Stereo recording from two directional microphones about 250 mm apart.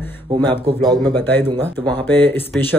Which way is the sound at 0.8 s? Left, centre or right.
Centre.